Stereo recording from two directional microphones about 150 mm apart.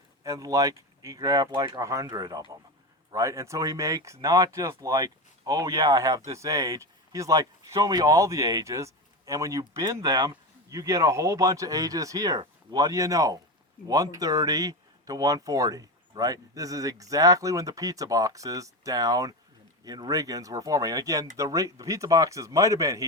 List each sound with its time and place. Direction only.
0.2 s speech: 25° right (ahead or behind)